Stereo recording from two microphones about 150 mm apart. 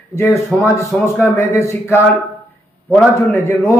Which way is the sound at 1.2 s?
15° left (ahead or behind).